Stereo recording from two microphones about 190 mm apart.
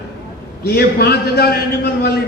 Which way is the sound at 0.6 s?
55° left (ahead or behind).